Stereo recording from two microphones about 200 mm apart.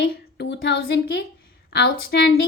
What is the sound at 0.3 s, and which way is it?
A woman's voice, 55° left (ahead or behind).